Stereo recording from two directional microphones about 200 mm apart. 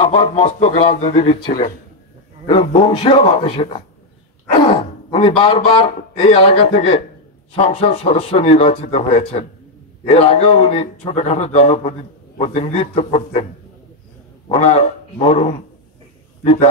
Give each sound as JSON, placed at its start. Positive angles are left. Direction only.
{"t": 0.1, "sound": "speech", "side_deg": 25}
{"t": 2.4, "sound": "a man's voice", "side_deg": 25}
{"t": 14.5, "sound": "a man's voice", "side_deg": 30}